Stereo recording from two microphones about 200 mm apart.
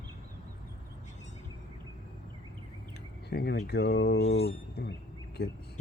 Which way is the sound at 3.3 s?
55° left (ahead or behind).